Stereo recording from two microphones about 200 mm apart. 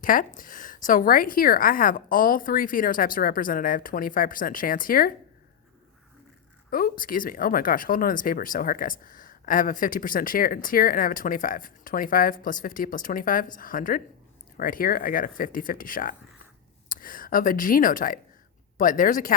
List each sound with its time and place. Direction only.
0.0 s speech: 40° left (ahead or behind)
6.7 s speech: 45° left (ahead or behind)